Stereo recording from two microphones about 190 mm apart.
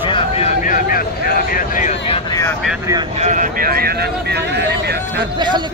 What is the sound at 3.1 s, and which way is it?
Speech, 40° right (ahead or behind).